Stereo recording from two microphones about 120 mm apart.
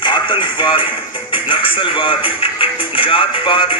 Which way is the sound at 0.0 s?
40° left (ahead or behind).